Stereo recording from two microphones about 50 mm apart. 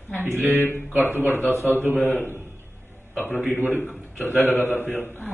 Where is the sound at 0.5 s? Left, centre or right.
Left.